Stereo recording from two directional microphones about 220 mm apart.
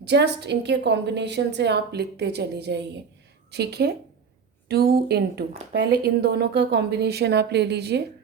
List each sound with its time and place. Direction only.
0.0 s speech: 50° right (ahead or behind)